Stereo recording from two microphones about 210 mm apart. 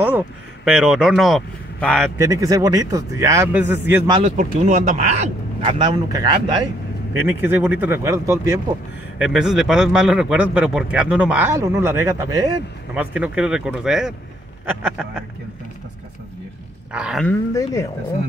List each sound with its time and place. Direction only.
0.7 s speech: 5° right (ahead or behind)
2.1 s a man's voice: 15° right (ahead or behind)
4.1 s speech: 30° right (ahead or behind)
5.6 s a man's voice: 25° right (ahead or behind)
9.2 s speech: 5° right (ahead or behind)
16.9 s speech: 5° right (ahead or behind)
17.3 s speech: 15° left (ahead or behind)